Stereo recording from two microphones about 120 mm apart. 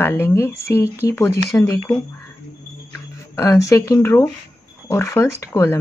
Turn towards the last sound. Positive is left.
turn(degrees=25)  # may be behind; listen again after turning